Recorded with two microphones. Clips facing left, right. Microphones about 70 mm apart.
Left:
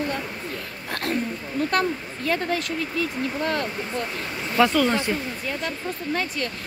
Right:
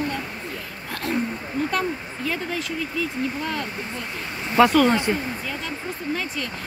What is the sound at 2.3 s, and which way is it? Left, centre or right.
Speech, left.